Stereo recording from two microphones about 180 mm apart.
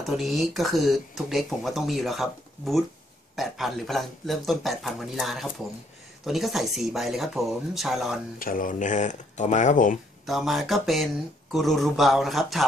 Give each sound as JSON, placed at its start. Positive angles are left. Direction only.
{"t": 0.1, "sound": "speech", "side_deg": 0}
{"t": 8.4, "sound": "speech", "side_deg": 50}
{"t": 10.2, "sound": "speech", "side_deg": 0}